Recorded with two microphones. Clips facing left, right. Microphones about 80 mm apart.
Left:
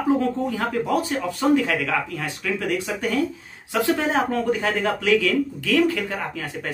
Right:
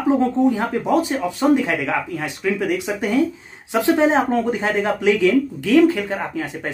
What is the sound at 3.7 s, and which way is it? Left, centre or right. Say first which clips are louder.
Speech: right 5 dB; right.